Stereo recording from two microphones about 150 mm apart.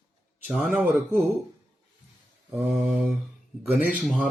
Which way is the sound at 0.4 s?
Centre (ahead or behind).